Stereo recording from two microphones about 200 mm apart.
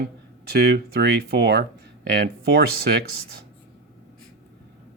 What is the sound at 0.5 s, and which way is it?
Speech, 50° right (ahead or behind).